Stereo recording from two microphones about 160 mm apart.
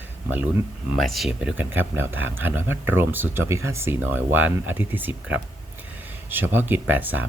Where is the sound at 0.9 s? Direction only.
Centre (ahead or behind).